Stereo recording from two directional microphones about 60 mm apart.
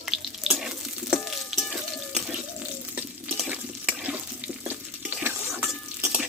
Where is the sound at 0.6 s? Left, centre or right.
Centre.